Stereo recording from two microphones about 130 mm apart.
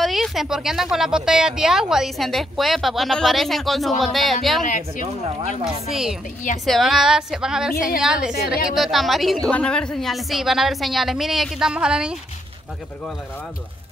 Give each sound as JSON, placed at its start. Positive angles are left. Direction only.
{"t": 0.0, "sound": "speech", "side_deg": 0}
{"t": 4.6, "sound": "speech", "side_deg": 80}
{"t": 5.6, "sound": "speech", "side_deg": -5}